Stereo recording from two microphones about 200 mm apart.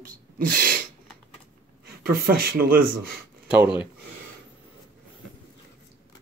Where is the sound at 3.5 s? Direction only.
5° right (ahead or behind).